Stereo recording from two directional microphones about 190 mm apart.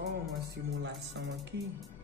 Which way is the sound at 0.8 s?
70° right (ahead or behind).